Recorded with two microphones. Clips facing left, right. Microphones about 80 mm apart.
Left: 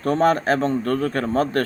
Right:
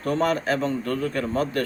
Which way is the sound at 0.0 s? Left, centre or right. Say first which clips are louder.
Left 5 dB; left.